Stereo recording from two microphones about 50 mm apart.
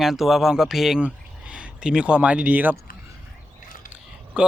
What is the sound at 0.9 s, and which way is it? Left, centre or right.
Speech, right.